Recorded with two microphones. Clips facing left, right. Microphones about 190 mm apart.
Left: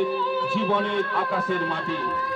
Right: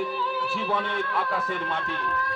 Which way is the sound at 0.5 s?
5° right (ahead or behind).